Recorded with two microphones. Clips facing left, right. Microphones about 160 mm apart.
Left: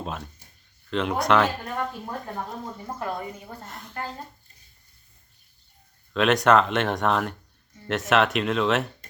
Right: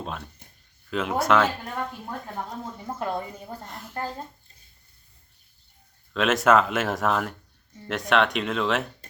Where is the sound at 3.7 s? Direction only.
Centre (ahead or behind).